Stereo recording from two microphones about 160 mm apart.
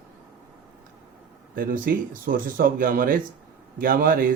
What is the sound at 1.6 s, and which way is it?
A man's voice, 60° right (ahead or behind).